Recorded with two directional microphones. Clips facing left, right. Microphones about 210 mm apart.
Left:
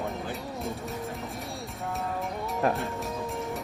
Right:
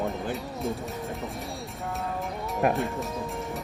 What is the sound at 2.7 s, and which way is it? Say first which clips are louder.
Music: right 3 dB; centre (ahead or behind).